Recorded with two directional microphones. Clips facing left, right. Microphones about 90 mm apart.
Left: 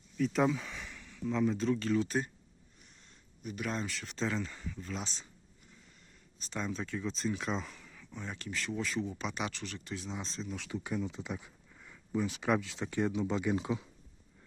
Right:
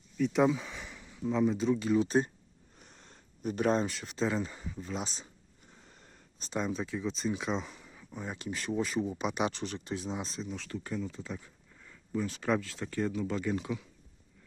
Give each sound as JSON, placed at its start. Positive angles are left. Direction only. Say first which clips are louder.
{"t": 0.2, "sound": "speech", "louder": "right 3 dB", "side_deg": -5}
{"t": 0.9, "sound": "speech", "louder": "right 3 dB", "side_deg": -15}
{"t": 2.7, "sound": "speech", "louder": "right 7 dB", "side_deg": -40}
{"t": 5.9, "sound": "a sound", "louder": "right 4 dB", "side_deg": -50}
{"t": 6.5, "sound": "speech", "louder": "right 4 dB", "side_deg": -10}
{"t": 10.5, "sound": "speech", "louder": "left 3 dB", "side_deg": 5}